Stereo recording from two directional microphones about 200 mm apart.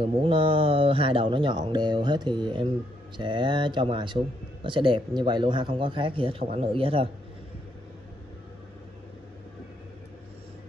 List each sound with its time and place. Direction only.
0.0 s speech: 25° right (ahead or behind)